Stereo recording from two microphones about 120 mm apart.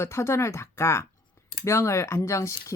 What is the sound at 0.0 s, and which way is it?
Speech, 20° left (ahead or behind).